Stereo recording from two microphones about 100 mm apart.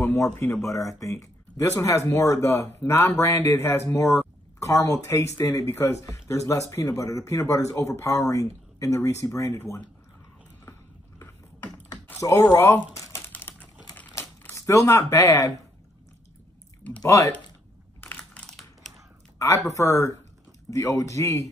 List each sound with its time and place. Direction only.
0.2 s speech: 25° left (ahead or behind)
11.1 s a sound: 25° left (ahead or behind)
12.2 s speech: 25° left (ahead or behind)
12.9 s typing: 30° left (ahead or behind)
14.5 s speech: 30° left (ahead or behind)
17.0 s speech: 30° left (ahead or behind)
18.0 s typing: 15° left (ahead or behind)
19.3 s speech: 30° left (ahead or behind)